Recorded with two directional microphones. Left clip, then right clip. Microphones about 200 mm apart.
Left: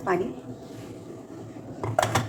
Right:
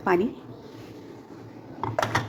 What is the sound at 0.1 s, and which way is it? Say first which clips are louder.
Speech: right 3 dB; 45° right (ahead or behind).